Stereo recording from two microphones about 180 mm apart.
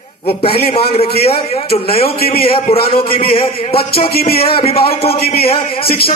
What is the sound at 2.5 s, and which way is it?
Speech, 30° left (ahead or behind).